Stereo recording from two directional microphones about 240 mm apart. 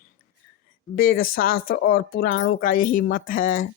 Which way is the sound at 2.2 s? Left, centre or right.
Left.